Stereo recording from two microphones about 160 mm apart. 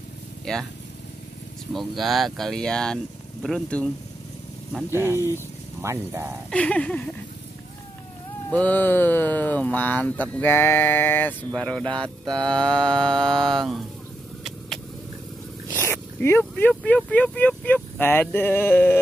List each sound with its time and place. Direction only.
0.5 s mantra: 5° left (ahead or behind)
1.7 s mantra: centre (ahead or behind)
4.9 s speech: 15° right (ahead or behind)
6.5 s speech: 5° left (ahead or behind)
8.5 s speech: 10° left (ahead or behind)
12.0 s mantra: 5° left (ahead or behind)
15.7 s speech: 15° left (ahead or behind)